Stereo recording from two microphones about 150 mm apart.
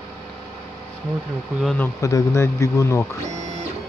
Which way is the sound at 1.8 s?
20° left (ahead or behind).